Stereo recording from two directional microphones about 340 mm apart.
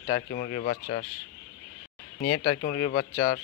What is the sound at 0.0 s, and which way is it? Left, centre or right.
Speech, left.